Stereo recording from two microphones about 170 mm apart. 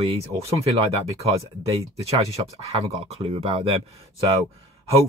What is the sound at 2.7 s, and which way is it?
Speech, 35° right (ahead or behind).